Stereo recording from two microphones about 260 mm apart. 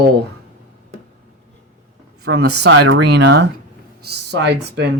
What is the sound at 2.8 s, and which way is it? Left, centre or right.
Speech, right.